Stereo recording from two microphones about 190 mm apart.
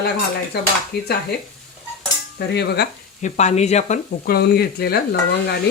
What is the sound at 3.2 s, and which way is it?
Speech, 35° left (ahead or behind).